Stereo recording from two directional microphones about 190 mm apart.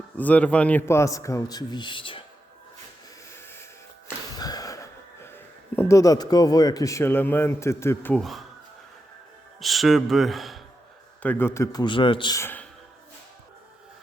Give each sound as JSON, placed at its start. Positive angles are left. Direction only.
{"t": 0.2, "sound": "a man's voice", "side_deg": 5}
{"t": 4.4, "sound": "a sound", "side_deg": 20}
{"t": 5.7, "sound": "a man's voice", "side_deg": 15}
{"t": 9.6, "sound": "a man's voice", "side_deg": 0}